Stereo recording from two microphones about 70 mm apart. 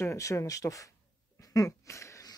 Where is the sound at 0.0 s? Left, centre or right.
Left.